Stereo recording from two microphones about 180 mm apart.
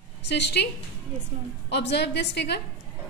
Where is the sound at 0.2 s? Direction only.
70° left (ahead or behind).